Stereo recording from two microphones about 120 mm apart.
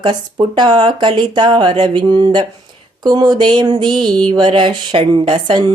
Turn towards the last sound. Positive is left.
turn(degrees=-40)  # may be behind; listen again after turning